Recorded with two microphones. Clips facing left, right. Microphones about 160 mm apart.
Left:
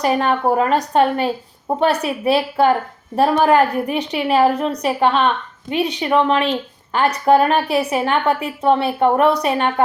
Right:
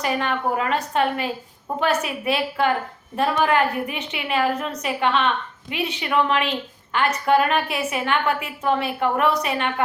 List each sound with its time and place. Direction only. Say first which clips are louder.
0.0 s a woman's voice: left 6 dB; 40° left (ahead or behind)